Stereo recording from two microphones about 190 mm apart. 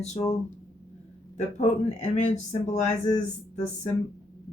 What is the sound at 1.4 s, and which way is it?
Speech, 35° left (ahead or behind).